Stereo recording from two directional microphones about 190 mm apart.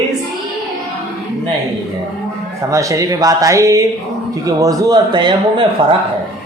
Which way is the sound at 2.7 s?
15° right (ahead or behind).